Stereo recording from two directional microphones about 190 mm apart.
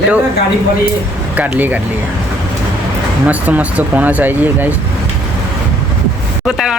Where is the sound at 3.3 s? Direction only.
10° right (ahead or behind).